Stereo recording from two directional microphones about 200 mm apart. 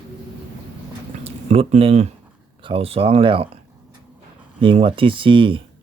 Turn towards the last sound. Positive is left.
turn(degrees=-25)  # may be behind; listen again after turning